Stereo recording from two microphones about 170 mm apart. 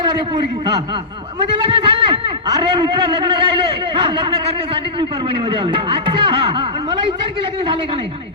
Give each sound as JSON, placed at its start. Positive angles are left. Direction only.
{"t": 0.0, "sound": "a man's voice", "side_deg": -25}
{"t": 1.5, "sound": "a man's voice", "side_deg": -30}